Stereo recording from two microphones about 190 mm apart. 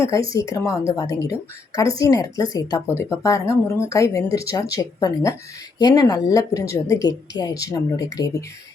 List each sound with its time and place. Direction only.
0.0 s speech: 15° left (ahead or behind)